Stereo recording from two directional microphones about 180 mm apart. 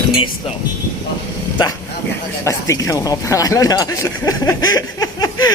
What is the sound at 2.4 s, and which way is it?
Speech, 15° left (ahead or behind).